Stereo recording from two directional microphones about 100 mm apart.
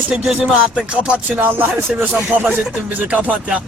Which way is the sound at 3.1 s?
10° right (ahead or behind).